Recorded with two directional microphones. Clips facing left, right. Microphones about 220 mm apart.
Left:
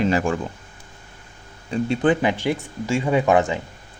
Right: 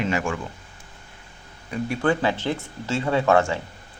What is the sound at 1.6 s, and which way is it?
Speech, 25° left (ahead or behind).